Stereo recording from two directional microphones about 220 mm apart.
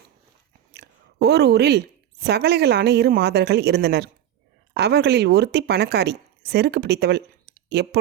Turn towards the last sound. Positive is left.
turn(degrees=-45)  # may be behind; listen again after turning